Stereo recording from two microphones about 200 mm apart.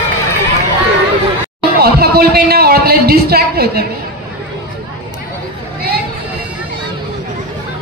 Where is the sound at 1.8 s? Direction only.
50° right (ahead or behind).